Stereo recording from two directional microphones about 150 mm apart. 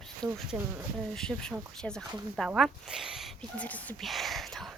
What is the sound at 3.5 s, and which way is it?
Speech, 10° left (ahead or behind).